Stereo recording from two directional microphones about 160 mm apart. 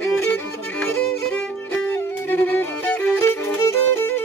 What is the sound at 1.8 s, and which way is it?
Music, 10° left (ahead or behind).